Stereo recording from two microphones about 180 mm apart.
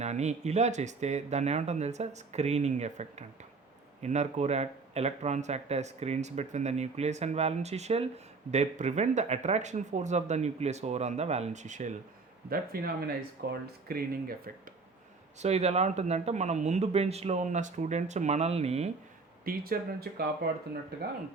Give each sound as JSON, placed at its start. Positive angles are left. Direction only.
{"t": 0.0, "sound": "speech", "side_deg": -40}
{"t": 12.5, "sound": "speech", "side_deg": -60}
{"t": 15.4, "sound": "speech", "side_deg": -35}
{"t": 19.5, "sound": "speech", "side_deg": -55}